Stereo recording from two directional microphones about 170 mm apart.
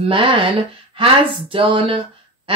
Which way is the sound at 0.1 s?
30° right (ahead or behind).